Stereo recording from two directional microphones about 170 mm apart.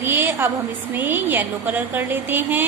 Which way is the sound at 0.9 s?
10° right (ahead or behind).